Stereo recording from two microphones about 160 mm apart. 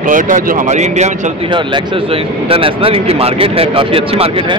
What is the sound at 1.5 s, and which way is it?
Speech, 30° right (ahead or behind).